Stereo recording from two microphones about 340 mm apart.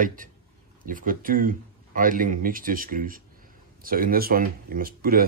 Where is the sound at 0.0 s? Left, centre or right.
Right.